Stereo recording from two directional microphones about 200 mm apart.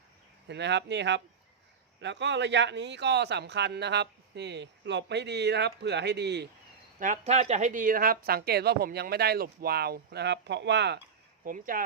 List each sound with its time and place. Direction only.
0.4 s speech: 60° right (ahead or behind)
7.0 s a woman's voice: 35° right (ahead or behind); by 11.0 s 60° right (ahead or behind)
11.4 s a woman's voice: 45° right (ahead or behind)